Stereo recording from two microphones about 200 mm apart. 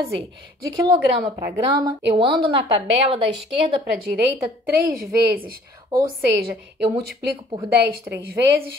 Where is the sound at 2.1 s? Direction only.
25° right (ahead or behind).